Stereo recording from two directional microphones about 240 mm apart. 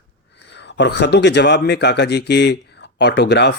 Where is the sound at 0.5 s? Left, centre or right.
Left.